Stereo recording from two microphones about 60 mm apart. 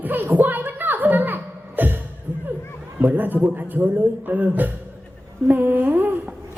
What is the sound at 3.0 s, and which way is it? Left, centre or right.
A man's voice, right.